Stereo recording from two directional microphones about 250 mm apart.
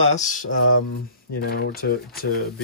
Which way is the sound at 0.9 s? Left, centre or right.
Left.